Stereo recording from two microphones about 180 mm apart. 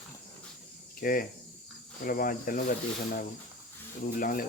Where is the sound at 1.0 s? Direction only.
50° left (ahead or behind).